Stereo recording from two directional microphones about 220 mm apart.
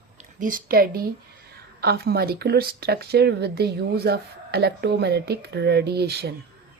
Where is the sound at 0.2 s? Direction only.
35° right (ahead or behind).